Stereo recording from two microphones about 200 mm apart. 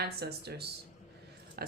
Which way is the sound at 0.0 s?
55° right (ahead or behind).